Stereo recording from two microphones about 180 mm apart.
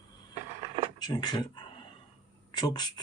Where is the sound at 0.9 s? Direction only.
20° left (ahead or behind).